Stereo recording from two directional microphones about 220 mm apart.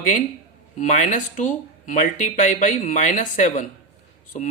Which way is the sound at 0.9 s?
35° left (ahead or behind).